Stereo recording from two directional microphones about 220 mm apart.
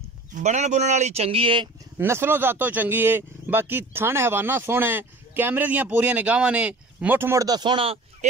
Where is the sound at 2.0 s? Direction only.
10° right (ahead or behind).